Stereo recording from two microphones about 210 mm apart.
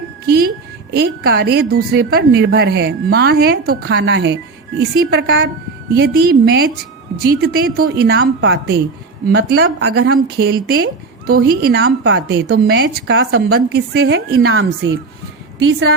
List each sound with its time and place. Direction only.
0.3 s a woman's voice: 50° right (ahead or behind); by 5.5 s 65° right (ahead or behind)
5.9 s a woman's voice: 45° right (ahead or behind)
14.4 s a woman's voice: 75° right (ahead or behind)